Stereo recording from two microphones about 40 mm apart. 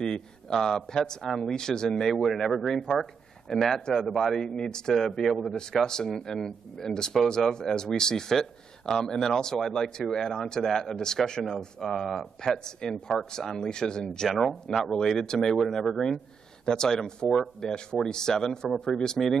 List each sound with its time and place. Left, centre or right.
0.0 s speech: centre
2.7 s a man's voice: centre
4.5 s a man's voice: centre